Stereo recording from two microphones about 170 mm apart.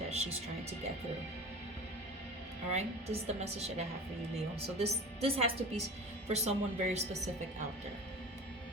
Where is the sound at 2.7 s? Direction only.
40° right (ahead or behind).